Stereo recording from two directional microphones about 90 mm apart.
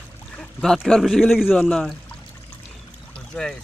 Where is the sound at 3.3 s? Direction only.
5° left (ahead or behind).